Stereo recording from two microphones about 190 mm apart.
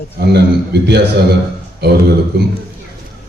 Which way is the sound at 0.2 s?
60° right (ahead or behind).